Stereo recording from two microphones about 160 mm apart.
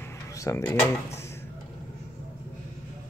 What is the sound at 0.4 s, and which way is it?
Speech, 20° left (ahead or behind).